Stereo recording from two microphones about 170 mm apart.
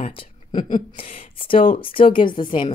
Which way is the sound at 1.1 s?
30° left (ahead or behind).